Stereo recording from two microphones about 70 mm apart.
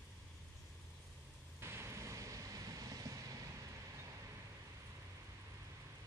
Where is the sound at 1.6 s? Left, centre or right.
Right.